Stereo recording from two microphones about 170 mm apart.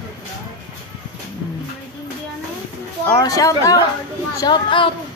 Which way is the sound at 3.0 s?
20° left (ahead or behind).